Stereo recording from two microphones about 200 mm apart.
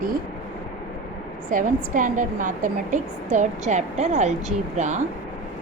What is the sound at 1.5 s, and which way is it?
A woman's voice, 40° right (ahead or behind).